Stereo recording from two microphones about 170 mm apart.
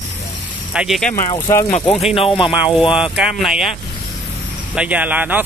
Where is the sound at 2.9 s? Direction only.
5° right (ahead or behind).